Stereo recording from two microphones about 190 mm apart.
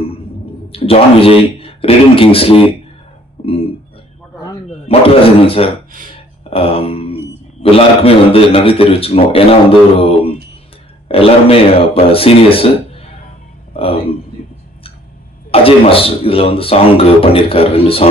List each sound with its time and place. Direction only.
0.7 s a man's voice: 30° left (ahead or behind)
4.8 s a man's voice: 30° left (ahead or behind)
15.5 s a man's voice: 30° left (ahead or behind)